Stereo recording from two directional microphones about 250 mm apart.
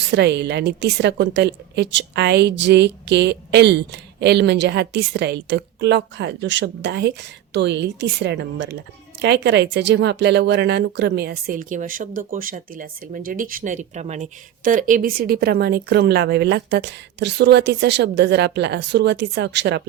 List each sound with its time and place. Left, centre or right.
0.1 s a woman's voice: right